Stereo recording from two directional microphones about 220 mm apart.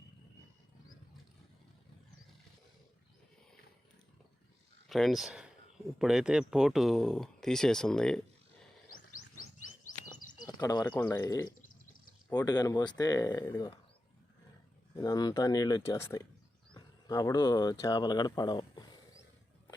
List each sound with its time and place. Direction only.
4.9 s speech: centre (ahead or behind)
9.1 s wild animals: 75° left (ahead or behind)
10.3 s bird: 15° left (ahead or behind)
10.8 s speech: 10° left (ahead or behind)
14.9 s speech: 15° left (ahead or behind)